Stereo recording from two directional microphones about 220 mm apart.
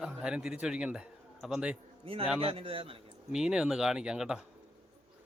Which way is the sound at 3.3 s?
5° right (ahead or behind).